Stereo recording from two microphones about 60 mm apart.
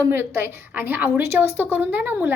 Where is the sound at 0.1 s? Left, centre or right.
Right.